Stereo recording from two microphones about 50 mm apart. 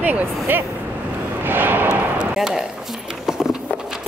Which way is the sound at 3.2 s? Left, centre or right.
Centre.